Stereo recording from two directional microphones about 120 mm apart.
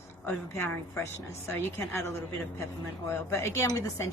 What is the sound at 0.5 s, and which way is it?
Speech, 20° left (ahead or behind).